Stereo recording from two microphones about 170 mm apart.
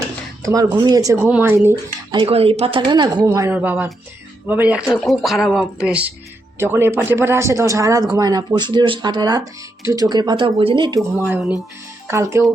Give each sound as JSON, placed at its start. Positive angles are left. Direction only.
{"t": 0.4, "sound": "speech", "side_deg": -20}
{"t": 2.1, "sound": "speech", "side_deg": -35}
{"t": 3.2, "sound": "speech", "side_deg": -15}
{"t": 12.0, "sound": "speech", "side_deg": -15}